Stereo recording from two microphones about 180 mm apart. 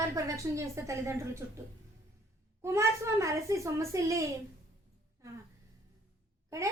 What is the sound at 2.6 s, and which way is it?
A woman's voice, 15° right (ahead or behind).